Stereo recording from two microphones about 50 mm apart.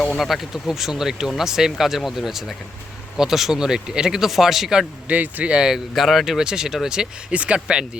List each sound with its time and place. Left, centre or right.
0.2 s speech: centre
5.0 s speech: right
5.9 s speech: centre